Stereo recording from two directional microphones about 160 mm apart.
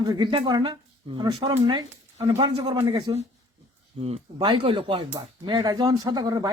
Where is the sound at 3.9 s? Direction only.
40° right (ahead or behind).